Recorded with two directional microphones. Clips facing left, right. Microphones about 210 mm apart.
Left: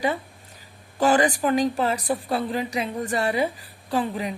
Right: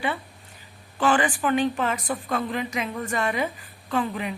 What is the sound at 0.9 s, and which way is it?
A woman's voice, 40° left (ahead or behind).